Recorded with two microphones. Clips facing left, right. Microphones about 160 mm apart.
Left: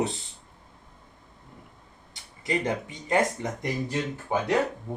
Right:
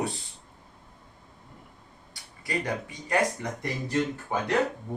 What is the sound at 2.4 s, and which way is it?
Speech, 20° left (ahead or behind).